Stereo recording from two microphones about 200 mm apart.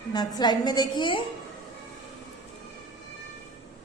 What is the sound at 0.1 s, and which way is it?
A woman's voice, 20° left (ahead or behind).